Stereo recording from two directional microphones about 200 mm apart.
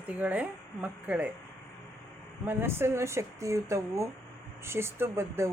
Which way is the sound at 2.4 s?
10° right (ahead or behind).